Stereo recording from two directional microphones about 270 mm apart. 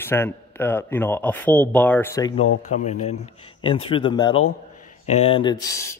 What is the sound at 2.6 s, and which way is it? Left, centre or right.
A man's voice, left.